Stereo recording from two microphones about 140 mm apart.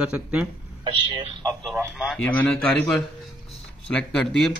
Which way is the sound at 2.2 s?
10° left (ahead or behind).